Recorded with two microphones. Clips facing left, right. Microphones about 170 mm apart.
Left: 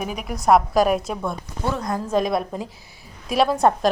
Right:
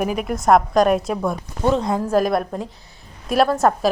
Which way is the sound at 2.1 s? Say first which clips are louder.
Right 1 dB; centre (ahead or behind).